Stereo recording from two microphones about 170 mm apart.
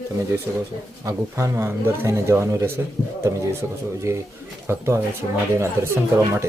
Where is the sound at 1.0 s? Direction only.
15° right (ahead or behind).